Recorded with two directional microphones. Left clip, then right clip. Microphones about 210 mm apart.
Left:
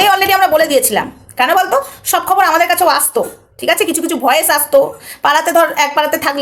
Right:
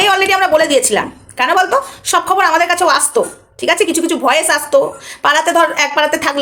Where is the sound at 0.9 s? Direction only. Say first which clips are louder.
Even; centre (ahead or behind).